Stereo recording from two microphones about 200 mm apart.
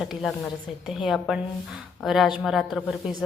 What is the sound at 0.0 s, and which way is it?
A woman's voice, centre (ahead or behind).